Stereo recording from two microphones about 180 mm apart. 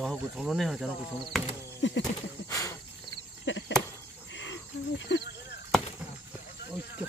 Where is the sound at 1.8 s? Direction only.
90° left.